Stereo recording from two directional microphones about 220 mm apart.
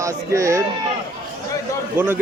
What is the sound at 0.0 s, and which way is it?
Speech, 15° right (ahead or behind).